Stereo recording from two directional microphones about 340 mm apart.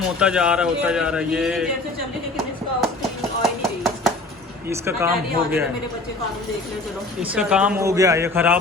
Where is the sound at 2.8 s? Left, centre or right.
Centre.